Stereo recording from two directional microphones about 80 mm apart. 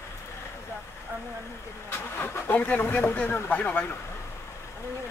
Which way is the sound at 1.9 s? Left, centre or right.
Left.